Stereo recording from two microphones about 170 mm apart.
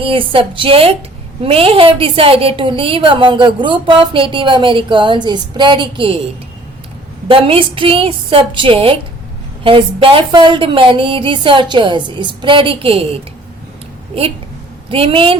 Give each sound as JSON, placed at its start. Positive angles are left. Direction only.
{"t": 0.0, "sound": "a woman's voice", "side_deg": -30}
{"t": 7.3, "sound": "a woman's voice", "side_deg": -30}
{"t": 14.1, "sound": "a woman's voice", "side_deg": -35}